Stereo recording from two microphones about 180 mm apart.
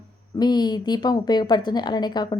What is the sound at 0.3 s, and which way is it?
A woman's voice, 25° left (ahead or behind).